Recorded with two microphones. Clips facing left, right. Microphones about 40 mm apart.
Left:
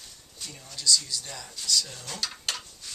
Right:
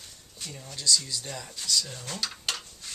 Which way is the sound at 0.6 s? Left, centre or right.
Right.